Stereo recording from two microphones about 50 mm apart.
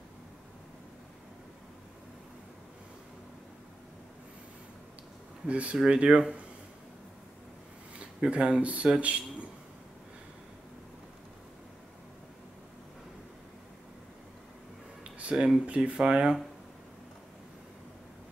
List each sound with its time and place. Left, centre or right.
5.5 s speech: right
8.0 s speech: right
15.3 s speech: centre